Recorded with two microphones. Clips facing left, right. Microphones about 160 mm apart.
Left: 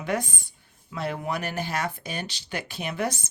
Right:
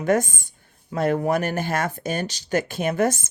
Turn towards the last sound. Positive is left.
turn(degrees=-50)  # may be behind; listen again after turning